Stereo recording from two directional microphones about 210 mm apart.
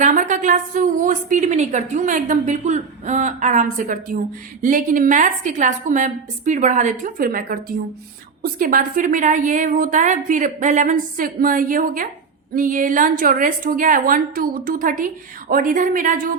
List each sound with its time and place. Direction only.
0.0 s a woman's voice: 40° right (ahead or behind)